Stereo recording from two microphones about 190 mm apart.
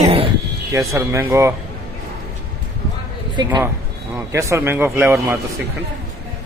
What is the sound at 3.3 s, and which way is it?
A man's voice, 20° right (ahead or behind).